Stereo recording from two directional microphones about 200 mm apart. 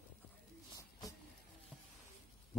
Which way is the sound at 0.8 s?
15° left (ahead or behind).